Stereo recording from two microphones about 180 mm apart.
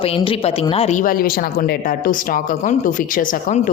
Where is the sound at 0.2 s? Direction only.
30° left (ahead or behind).